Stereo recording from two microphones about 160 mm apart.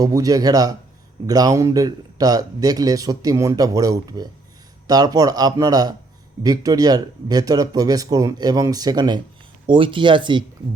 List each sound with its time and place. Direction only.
0.0 s a man's voice: 20° right (ahead or behind)